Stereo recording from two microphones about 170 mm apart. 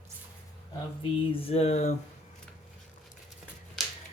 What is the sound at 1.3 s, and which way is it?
Speech, 35° left (ahead or behind).